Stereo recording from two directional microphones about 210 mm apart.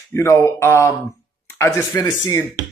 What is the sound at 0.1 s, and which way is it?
Speech, 15° left (ahead or behind).